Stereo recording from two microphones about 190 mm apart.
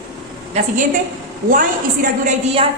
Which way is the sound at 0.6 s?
35° right (ahead or behind).